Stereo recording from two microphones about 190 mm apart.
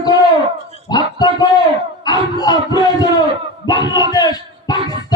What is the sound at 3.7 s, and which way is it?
A man's voice, 20° left (ahead or behind).